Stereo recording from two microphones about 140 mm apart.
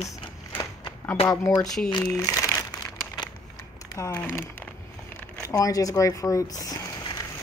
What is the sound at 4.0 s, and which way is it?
Speech, 15° left (ahead or behind).